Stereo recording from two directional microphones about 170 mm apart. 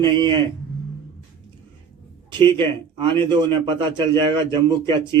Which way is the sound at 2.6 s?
30° right (ahead or behind).